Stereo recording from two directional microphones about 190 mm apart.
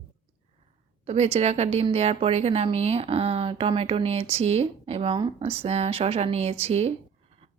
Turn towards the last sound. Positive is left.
turn(degrees=-35)  # may be behind; listen again after turning